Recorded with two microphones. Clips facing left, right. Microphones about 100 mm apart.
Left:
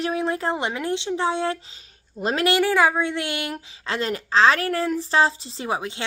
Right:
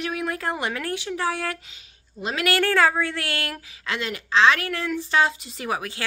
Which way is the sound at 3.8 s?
35° left (ahead or behind).